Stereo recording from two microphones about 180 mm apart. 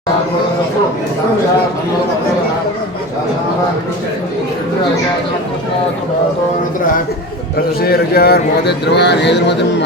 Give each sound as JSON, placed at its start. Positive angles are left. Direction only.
{"t": 7.8, "sound": "a man's voice", "side_deg": 60}